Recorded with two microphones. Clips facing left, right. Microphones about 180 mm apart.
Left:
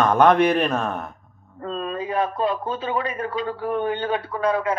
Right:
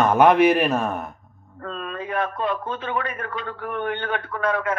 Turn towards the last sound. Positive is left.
turn(degrees=35)  # may be behind; listen again after turning